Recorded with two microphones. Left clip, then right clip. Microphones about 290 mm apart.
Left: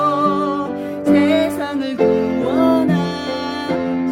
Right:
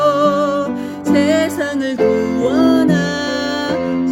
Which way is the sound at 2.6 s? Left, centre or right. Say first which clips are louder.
Right 1 dB; left.